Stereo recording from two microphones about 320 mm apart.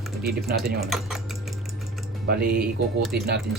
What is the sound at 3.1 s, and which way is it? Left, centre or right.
Speech, right.